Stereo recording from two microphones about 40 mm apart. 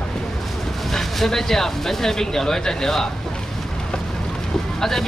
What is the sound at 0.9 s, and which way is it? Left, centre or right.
Speech, centre.